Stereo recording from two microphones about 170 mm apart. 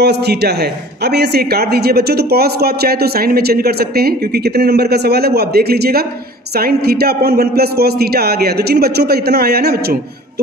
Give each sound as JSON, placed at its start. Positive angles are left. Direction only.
{"t": 0.0, "sound": "a man's voice", "side_deg": -75}